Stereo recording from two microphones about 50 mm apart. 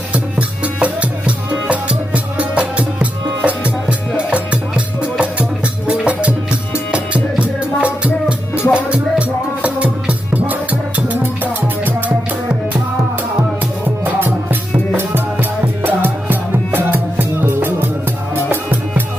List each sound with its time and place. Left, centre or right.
0.1 s music: right
5.9 s music: right
14.0 s music: right